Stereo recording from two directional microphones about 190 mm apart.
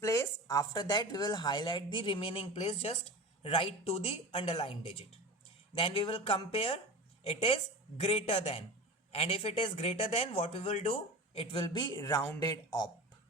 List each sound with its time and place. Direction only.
0.0 s speech: 15° left (ahead or behind)
8.0 s speech: 30° left (ahead or behind)
11.3 s speech: 25° left (ahead or behind)